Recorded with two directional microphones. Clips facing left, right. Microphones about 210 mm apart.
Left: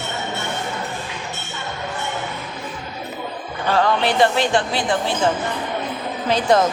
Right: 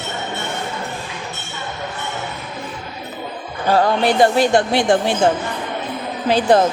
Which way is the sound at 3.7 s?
40° right (ahead or behind).